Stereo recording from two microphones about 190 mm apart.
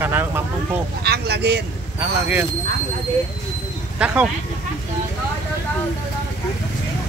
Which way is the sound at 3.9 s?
5° right (ahead or behind).